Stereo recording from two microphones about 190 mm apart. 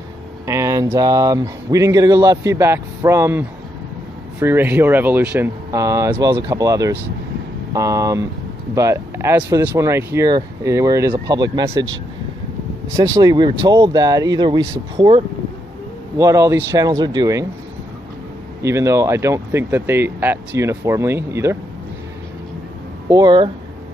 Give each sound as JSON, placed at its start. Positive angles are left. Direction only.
{"t": 0.5, "sound": "speech", "side_deg": -15}
{"t": 12.9, "sound": "speech", "side_deg": -20}
{"t": 18.6, "sound": "speech", "side_deg": -15}
{"t": 23.0, "sound": "speech", "side_deg": -20}